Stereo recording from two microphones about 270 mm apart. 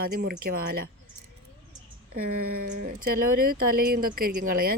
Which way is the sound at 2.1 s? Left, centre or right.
Right.